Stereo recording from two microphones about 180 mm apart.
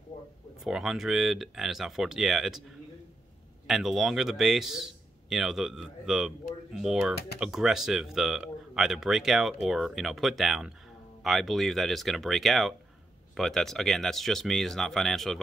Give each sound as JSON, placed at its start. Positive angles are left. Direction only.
{"t": 0.1, "sound": "a sound", "side_deg": 40}
{"t": 0.7, "sound": "speech", "side_deg": 0}
{"t": 3.6, "sound": "speech", "side_deg": 0}